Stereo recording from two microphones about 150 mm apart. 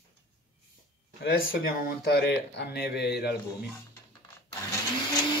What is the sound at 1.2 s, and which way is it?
Speech, 85° left.